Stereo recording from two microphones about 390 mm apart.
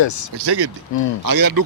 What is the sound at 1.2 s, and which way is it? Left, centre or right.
Speech, right.